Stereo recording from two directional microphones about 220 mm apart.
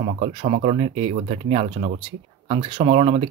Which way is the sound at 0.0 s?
30° right (ahead or behind).